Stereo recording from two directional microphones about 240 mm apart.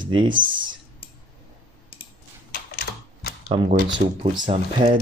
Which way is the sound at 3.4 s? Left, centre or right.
Right.